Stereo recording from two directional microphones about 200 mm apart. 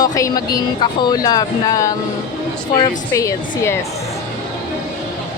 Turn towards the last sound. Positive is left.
turn(degrees=15)  # may be behind; listen again after turning